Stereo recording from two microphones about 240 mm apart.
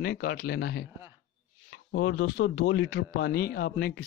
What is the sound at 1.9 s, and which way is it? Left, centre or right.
Speech, left.